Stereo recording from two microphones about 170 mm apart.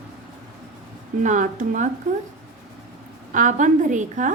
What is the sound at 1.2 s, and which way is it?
Speech, 45° right (ahead or behind).